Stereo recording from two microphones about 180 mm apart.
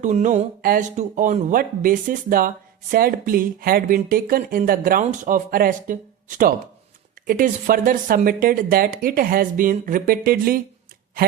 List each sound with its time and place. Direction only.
0.0 s speech: 45° right (ahead or behind)